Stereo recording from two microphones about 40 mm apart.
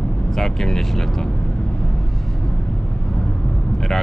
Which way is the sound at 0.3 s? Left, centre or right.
Centre.